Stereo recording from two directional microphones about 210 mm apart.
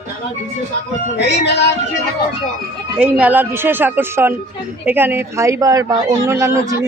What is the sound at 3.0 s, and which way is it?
A man's voice, 5° right (ahead or behind).